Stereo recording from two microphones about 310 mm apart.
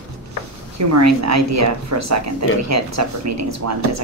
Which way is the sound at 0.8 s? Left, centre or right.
Right.